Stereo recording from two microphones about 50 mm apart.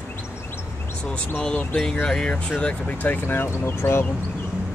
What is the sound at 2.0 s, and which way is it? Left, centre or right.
Speech, centre.